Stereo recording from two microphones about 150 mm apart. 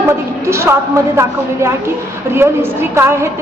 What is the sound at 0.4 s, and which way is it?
Speech, 20° right (ahead or behind).